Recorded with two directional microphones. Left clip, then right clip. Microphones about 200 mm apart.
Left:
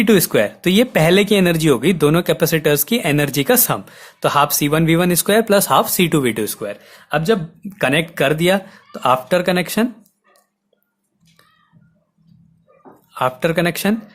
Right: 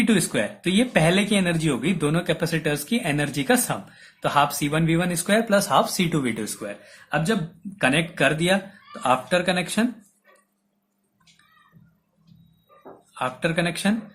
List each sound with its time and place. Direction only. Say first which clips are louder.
0.0 s speech: left 8 dB; 55° left (ahead or behind)
13.1 s speech: left 7 dB; 55° left (ahead or behind)